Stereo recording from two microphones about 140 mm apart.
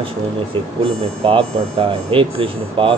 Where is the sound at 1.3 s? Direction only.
40° right (ahead or behind).